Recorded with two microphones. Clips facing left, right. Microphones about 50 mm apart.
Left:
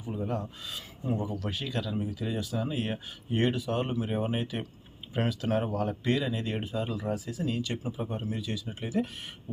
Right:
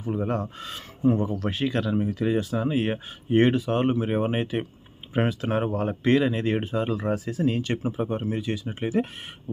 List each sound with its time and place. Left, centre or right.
0.0 s speech: right